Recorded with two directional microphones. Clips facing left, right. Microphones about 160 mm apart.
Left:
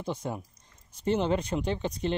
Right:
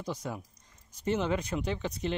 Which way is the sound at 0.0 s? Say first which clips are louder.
Left 3 dB; 30° left (ahead or behind).